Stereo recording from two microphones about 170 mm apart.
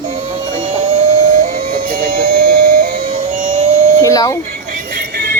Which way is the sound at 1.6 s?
45° right (ahead or behind).